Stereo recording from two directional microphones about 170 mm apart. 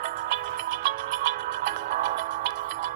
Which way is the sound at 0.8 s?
80° right.